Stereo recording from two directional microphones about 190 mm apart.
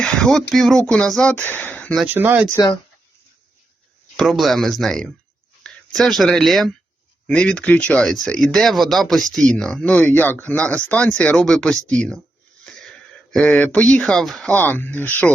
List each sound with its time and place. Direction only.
0.0 s a sound: 5° left (ahead or behind)
0.5 s speech: centre (ahead or behind)
2.0 s speech: 10° right (ahead or behind)
2.5 s speech: 20° left (ahead or behind)
4.2 s speech: centre (ahead or behind)
13.3 s speech: 5° left (ahead or behind)